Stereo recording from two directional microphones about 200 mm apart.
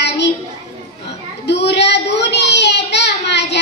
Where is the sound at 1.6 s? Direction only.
60° left (ahead or behind).